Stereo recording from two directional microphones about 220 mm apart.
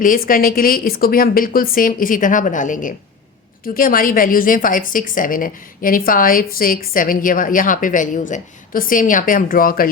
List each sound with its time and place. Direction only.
0.0 s a woman's voice: 40° left (ahead or behind)